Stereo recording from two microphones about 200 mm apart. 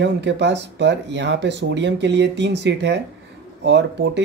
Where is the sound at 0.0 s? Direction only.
60° right (ahead or behind).